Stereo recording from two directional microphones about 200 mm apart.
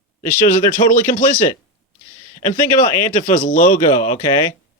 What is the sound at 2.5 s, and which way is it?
Speech, 40° left (ahead or behind).